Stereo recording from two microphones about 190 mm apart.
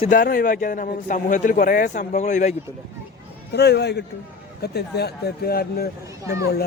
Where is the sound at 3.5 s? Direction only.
60° left (ahead or behind).